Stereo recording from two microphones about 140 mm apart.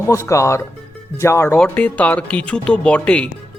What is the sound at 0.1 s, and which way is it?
Speech, 20° left (ahead or behind).